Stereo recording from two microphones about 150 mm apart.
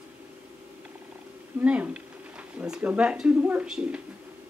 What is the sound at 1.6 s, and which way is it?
Speech, 10° right (ahead or behind).